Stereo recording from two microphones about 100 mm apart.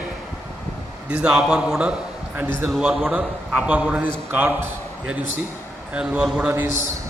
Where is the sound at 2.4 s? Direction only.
20° right (ahead or behind).